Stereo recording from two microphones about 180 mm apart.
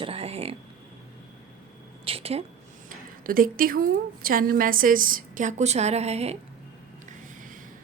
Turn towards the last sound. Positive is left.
turn(degrees=-45)  # may be behind; listen again after turning